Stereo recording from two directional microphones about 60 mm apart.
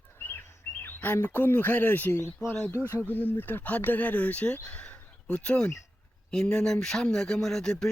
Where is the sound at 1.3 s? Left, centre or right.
Left.